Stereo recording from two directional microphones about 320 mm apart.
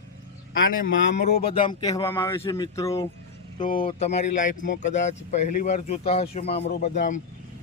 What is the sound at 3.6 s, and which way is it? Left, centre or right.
Speech, left.